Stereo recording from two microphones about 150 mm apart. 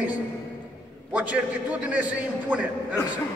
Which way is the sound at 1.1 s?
10° right (ahead or behind).